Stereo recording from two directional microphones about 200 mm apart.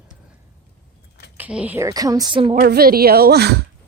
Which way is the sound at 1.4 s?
5° right (ahead or behind).